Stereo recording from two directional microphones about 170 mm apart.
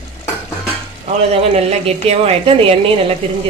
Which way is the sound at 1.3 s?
40° right (ahead or behind).